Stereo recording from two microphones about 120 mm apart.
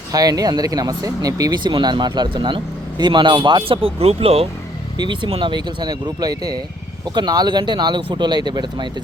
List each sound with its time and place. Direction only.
0.1 s speech: 30° right (ahead or behind); by 4.4 s 55° right (ahead or behind)
4.9 s speech: 40° right (ahead or behind)